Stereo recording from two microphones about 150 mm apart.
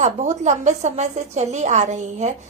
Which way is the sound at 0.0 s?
50° right (ahead or behind).